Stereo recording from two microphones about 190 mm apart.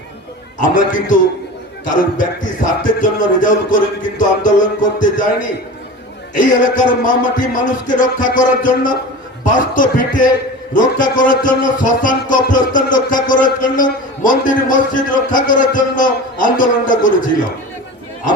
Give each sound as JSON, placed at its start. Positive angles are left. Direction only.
{"t": 0.6, "sound": "a man's voice", "side_deg": 45}